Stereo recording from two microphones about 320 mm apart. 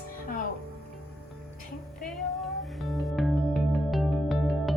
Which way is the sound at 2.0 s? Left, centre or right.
Centre.